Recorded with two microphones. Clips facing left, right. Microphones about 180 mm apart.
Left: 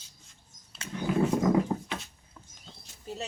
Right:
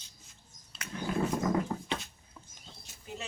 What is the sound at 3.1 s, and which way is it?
Speech, 35° left (ahead or behind).